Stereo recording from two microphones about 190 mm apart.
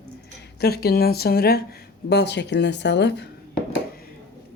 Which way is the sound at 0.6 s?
55° left (ahead or behind).